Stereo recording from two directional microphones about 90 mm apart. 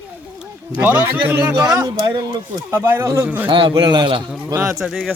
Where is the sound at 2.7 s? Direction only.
25° right (ahead or behind).